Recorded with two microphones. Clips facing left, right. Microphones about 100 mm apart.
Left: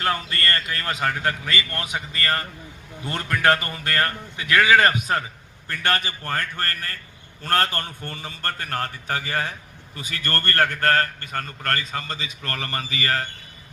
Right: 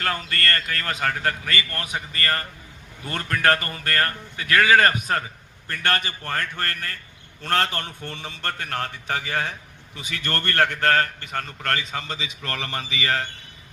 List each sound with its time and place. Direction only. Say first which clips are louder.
0.0 s a man's voice: left 1 dB; 15° left (ahead or behind); by 13.2 s centre (ahead or behind)